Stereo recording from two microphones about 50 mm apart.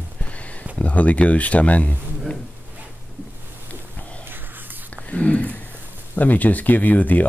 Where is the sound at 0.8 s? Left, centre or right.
Left.